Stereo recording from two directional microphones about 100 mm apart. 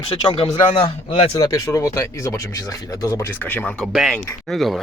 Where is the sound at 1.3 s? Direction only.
35° left (ahead or behind); by 3.7 s 20° left (ahead or behind).